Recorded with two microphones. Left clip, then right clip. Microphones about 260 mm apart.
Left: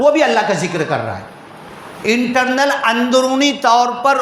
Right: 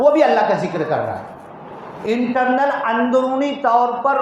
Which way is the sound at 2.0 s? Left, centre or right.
Left.